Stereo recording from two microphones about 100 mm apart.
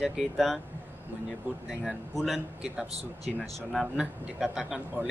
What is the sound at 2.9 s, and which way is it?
Speech, 90° right.